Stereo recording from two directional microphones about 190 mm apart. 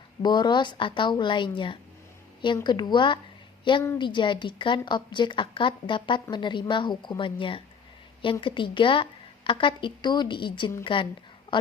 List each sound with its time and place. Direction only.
0.2 s a woman's voice: 25° left (ahead or behind)